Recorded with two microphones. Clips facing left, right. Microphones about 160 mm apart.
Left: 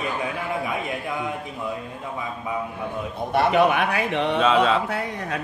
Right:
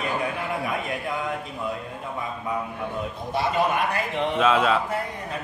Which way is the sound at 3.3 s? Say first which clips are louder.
Left 5 dB; 65° left (ahead or behind).